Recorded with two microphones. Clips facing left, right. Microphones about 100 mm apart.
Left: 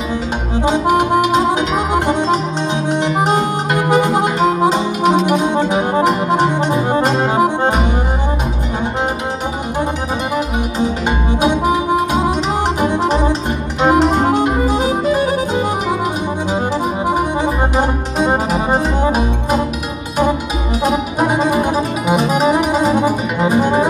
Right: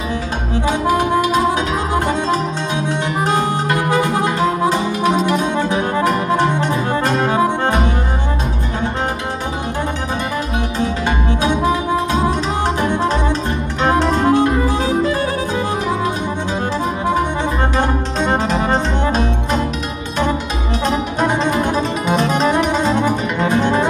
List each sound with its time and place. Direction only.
0.7 s music: 20° left (ahead or behind)
10.3 s music: 15° left (ahead or behind)
17.0 s accordion: 15° left (ahead or behind)
20.8 s music: 10° left (ahead or behind)